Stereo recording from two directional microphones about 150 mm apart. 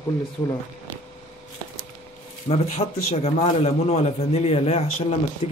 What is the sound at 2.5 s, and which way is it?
Speech, 50° left (ahead or behind).